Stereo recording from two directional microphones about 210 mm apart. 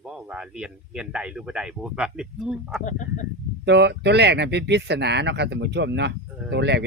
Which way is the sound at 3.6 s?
55° right (ahead or behind).